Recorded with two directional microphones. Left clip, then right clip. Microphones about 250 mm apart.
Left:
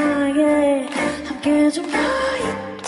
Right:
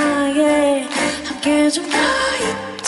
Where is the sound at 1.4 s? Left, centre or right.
Centre.